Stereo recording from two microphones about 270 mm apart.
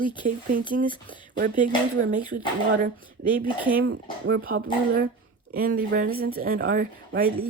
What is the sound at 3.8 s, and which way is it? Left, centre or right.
Speech, right.